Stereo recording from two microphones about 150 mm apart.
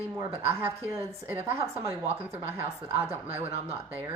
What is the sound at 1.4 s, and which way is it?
Speech, 40° right (ahead or behind).